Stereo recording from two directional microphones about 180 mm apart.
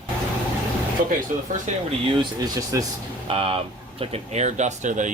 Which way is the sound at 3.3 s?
30° right (ahead or behind).